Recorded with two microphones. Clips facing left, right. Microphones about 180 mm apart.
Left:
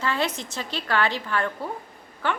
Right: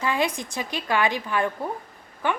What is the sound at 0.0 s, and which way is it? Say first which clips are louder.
A woman's voice: right 2 dB; 15° right (ahead or behind).